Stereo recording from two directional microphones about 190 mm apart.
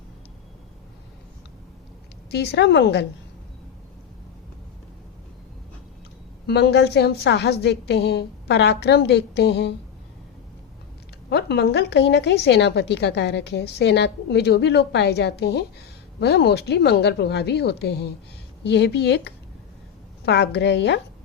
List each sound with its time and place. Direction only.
2.3 s a woman's voice: 60° left (ahead or behind)
6.5 s a woman's voice: 60° left (ahead or behind)
11.3 s a woman's voice: 60° left (ahead or behind)